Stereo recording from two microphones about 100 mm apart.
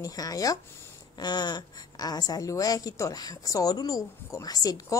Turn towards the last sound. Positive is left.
turn(degrees=40)  # may be behind; listen again after turning